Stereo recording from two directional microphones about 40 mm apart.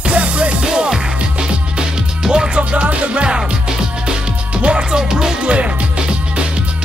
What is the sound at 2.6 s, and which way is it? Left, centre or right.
Music, right.